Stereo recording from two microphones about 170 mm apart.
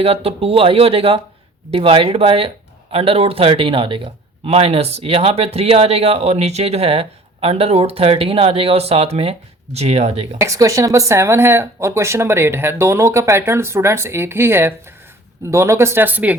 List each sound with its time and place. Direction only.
0.0 s speech: 35° right (ahead or behind)
10.4 s speech: 20° right (ahead or behind)